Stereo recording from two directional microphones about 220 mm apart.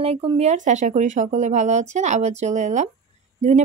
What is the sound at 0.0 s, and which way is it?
Speech, 25° right (ahead or behind).